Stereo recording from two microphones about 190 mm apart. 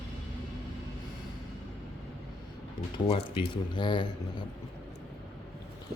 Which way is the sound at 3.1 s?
25° left (ahead or behind).